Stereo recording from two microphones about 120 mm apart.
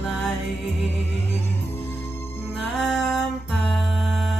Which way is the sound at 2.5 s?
Centre (ahead or behind).